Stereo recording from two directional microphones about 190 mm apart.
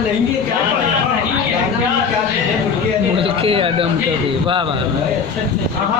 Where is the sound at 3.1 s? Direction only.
30° right (ahead or behind).